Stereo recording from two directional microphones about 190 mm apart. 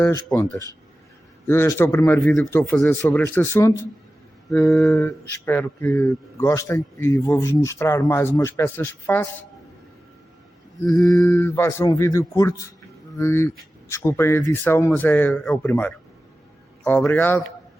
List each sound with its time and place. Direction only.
1.5 s speech: 10° left (ahead or behind)
10.8 s speech: 20° left (ahead or behind)